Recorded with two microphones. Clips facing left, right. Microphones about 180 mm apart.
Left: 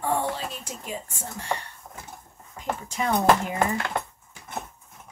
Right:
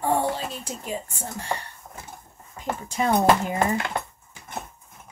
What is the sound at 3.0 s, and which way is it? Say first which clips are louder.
Speech: right 3 dB; 30° right (ahead or behind).